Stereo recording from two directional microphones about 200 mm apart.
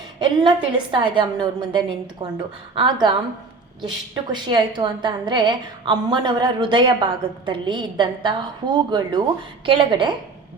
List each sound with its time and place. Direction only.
0.2 s a woman's voice: 20° right (ahead or behind)